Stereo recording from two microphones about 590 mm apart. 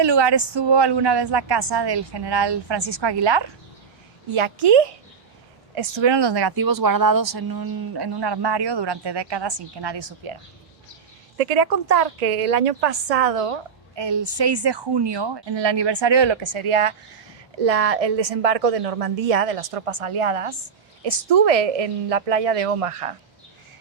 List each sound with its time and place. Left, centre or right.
0.0 s a woman's voice: right
11.3 s a woman's voice: right
17.6 s a woman's voice: right